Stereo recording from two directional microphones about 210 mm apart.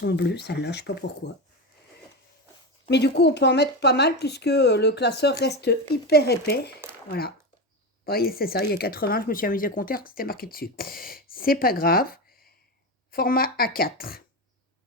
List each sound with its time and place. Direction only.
0.0 s speech: 50° left (ahead or behind)
2.9 s speech: 50° left (ahead or behind)